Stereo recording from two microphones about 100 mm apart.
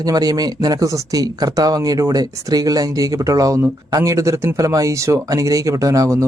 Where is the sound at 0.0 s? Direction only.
40° right (ahead or behind).